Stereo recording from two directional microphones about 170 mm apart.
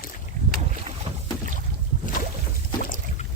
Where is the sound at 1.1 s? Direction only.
35° right (ahead or behind).